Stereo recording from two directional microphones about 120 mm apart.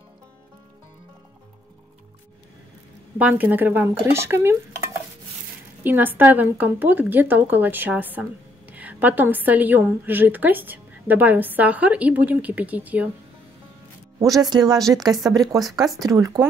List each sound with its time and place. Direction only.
3.2 s a woman's voice: 15° right (ahead or behind)
5.9 s a woman's voice: 15° right (ahead or behind)
14.2 s speech: 30° right (ahead or behind)
14.8 s a woman's voice: centre (ahead or behind)
15.8 s speech: 30° right (ahead or behind)